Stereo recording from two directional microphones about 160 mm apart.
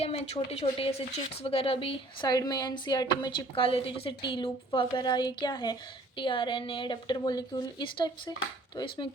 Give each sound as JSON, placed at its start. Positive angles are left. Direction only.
{"t": 0.0, "sound": "speech", "side_deg": 40}